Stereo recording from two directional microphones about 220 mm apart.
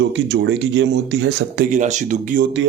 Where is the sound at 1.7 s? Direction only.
35° right (ahead or behind).